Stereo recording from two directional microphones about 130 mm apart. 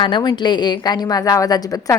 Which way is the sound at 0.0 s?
35° left (ahead or behind).